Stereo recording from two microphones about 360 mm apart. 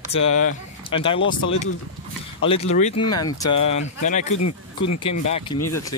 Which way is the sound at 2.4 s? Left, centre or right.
Centre.